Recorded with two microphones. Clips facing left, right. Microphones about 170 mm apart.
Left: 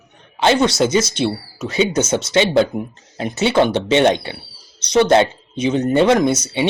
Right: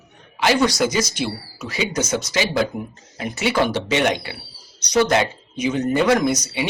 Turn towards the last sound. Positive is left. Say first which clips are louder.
# left 4 dB
turn(degrees=25)  # may be behind; listen again after turning